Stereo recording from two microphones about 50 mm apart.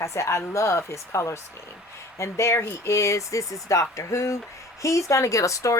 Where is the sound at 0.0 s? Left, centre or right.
Left.